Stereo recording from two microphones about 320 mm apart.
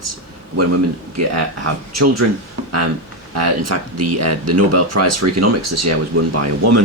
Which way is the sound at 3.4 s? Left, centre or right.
Right.